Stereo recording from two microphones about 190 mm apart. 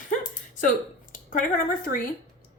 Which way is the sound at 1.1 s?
45° left (ahead or behind).